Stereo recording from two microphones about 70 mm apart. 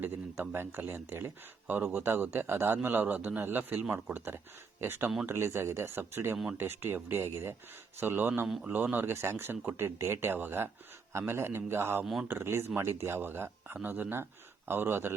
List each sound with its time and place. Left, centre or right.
0.0 s speech: right
6.3 s speech: centre
6.6 s speech: right